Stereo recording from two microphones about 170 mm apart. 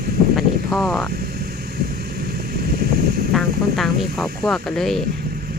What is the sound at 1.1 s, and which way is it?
Vehicle, 65° right (ahead or behind).